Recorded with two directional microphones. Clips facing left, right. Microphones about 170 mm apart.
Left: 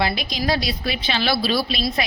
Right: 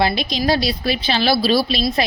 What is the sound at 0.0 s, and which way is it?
A woman's voice, 30° right (ahead or behind).